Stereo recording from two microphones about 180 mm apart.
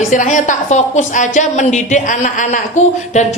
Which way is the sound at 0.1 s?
45° left (ahead or behind).